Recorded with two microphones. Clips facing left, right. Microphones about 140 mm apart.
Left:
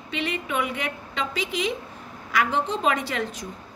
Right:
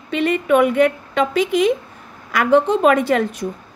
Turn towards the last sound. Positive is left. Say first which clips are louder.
# right 11 dB
turn(degrees=-55)  # may be behind; listen again after turning